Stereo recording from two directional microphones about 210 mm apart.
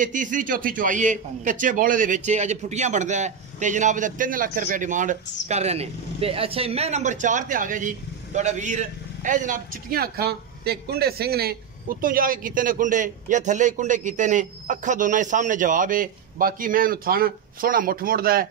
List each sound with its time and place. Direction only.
0.0 s a man's voice: 40° right (ahead or behind)